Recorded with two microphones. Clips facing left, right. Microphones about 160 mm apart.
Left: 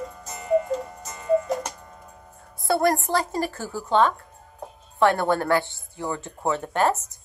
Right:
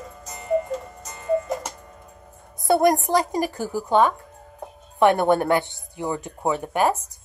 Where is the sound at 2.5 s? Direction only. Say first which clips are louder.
Right 3 dB; 20° right (ahead or behind).